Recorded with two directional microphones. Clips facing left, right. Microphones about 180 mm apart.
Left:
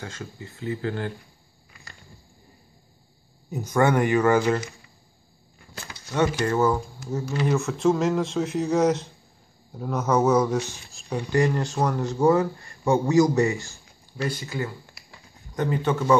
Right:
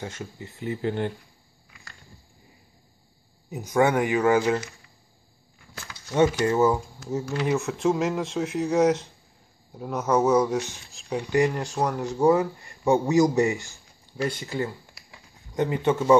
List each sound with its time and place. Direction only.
0.0 s speech: 20° right (ahead or behind)
3.4 s speech: 10° right (ahead or behind)
6.1 s speech: 20° right (ahead or behind)
15.0 s a sound: 20° right (ahead or behind)